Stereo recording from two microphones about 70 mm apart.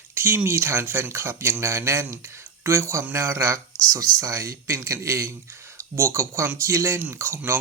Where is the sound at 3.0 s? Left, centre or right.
Right.